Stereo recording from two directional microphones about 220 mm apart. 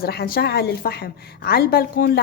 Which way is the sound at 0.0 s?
45° left (ahead or behind).